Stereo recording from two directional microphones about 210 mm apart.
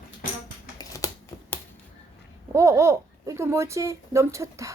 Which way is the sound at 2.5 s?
15° right (ahead or behind).